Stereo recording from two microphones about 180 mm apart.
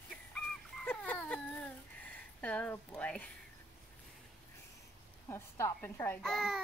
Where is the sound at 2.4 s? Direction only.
10° left (ahead or behind).